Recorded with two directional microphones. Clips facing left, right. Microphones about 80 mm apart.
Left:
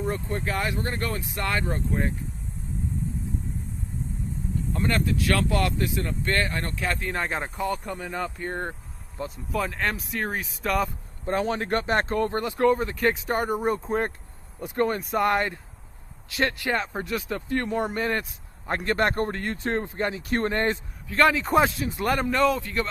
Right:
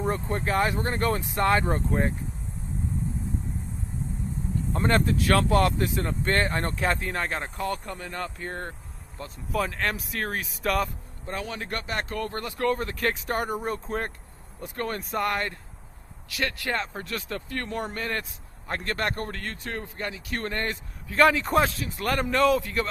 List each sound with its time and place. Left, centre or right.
0.0 s speech: right
4.7 s speech: right
7.0 s speech: centre
11.3 s speech: left
12.8 s speech: centre
13.6 s speech: centre
14.9 s speech: centre
15.2 s speech: centre
21.1 s speech: centre
21.8 s speech: centre
22.1 s speech: centre